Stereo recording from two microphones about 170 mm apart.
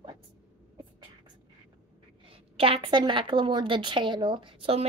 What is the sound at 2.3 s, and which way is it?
A woman's voice, 35° right (ahead or behind).